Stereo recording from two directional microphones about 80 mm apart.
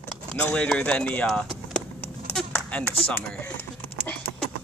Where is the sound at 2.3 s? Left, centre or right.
Centre.